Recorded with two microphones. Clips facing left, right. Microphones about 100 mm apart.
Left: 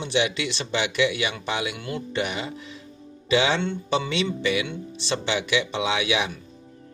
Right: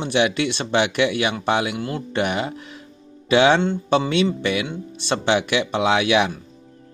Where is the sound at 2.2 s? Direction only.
55° right (ahead or behind).